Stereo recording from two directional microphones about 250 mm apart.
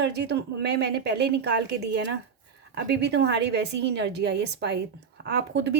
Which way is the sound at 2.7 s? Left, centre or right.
Right.